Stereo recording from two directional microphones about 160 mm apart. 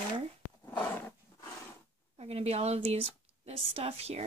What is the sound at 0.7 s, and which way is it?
Roaring cats, 10° left (ahead or behind).